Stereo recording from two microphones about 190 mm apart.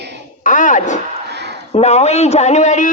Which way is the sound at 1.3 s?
60° right (ahead or behind).